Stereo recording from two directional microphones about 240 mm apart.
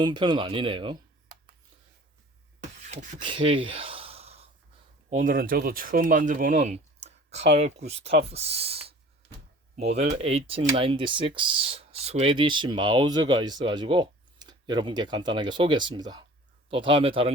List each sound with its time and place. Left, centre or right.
0.0 s speech: centre
2.6 s gasp: right
5.1 s speech: right